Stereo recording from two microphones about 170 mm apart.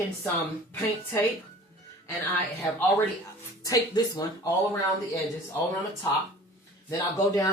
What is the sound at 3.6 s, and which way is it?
Speech, 20° left (ahead or behind).